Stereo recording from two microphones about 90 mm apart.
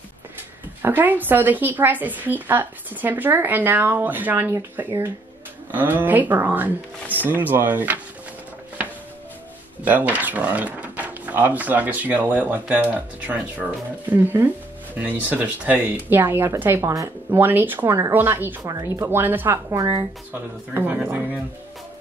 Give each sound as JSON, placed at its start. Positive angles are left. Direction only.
{"t": 0.8, "sound": "speech", "side_deg": -20}
{"t": 9.8, "sound": "speech", "side_deg": -20}
{"t": 16.8, "sound": "speech", "side_deg": -35}
{"t": 18.6, "sound": "speech", "side_deg": -35}
{"t": 19.8, "sound": "speech", "side_deg": -40}
{"t": 20.7, "sound": "speech", "side_deg": -25}